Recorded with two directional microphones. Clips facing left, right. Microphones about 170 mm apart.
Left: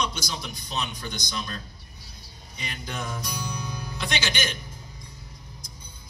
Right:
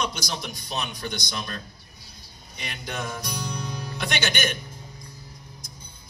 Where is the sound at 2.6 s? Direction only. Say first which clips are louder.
Right 1 dB; 65° right (ahead or behind).